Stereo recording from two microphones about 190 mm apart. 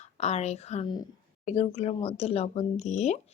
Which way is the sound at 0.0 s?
35° left (ahead or behind).